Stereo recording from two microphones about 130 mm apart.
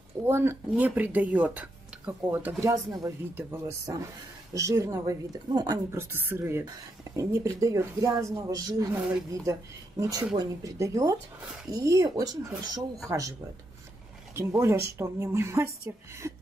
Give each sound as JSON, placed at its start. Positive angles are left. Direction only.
{"t": 0.2, "sound": "speech", "side_deg": -20}
{"t": 2.6, "sound": "speech", "side_deg": -25}
{"t": 5.9, "sound": "speech", "side_deg": -20}
{"t": 14.3, "sound": "speech", "side_deg": -20}